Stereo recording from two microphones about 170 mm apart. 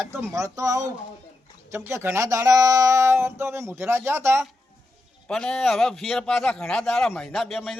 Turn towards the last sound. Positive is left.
turn(degrees=0)  # may be behind; listen again after turning